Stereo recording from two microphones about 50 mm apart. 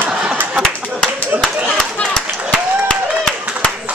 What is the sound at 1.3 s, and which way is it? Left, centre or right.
Clapping, right.